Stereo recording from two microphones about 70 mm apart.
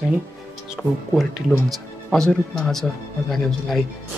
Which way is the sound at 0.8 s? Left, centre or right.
Centre.